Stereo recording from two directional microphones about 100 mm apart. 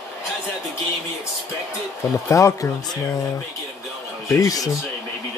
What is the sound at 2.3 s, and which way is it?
Speech, 30° left (ahead or behind).